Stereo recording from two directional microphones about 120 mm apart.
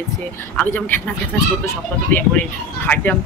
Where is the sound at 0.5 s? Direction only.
15° left (ahead or behind).